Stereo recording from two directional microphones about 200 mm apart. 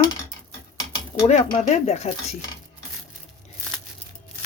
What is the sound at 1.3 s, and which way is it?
Speech, 35° left (ahead or behind).